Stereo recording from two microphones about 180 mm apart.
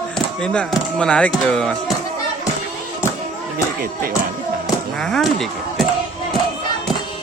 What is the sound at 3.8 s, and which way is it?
Music, 50° right (ahead or behind).